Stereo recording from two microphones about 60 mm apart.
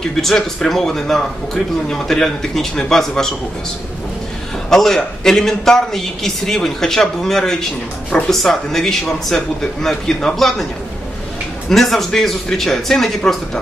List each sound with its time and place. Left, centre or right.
0.1 s a man's voice: centre
4.6 s a man's voice: centre
11.7 s a man's voice: centre